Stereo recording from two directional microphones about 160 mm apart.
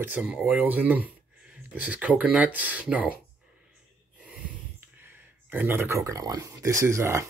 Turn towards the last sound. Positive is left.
turn(degrees=-20)  # may be behind; listen again after turning